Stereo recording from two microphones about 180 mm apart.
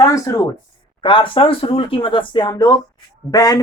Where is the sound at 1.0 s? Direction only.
30° left (ahead or behind).